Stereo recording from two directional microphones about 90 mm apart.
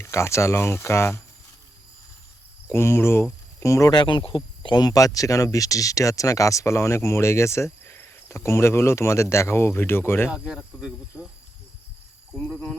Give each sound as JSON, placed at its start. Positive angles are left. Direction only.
{"t": 0.0, "sound": "speech", "side_deg": 30}
{"t": 2.7, "sound": "speech", "side_deg": 30}
{"t": 4.0, "sound": "speech", "side_deg": 65}
{"t": 10.2, "sound": "speech", "side_deg": -5}
{"t": 12.4, "sound": "speech", "side_deg": 10}